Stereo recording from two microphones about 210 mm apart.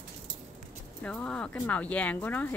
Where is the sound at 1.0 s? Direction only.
5° left (ahead or behind).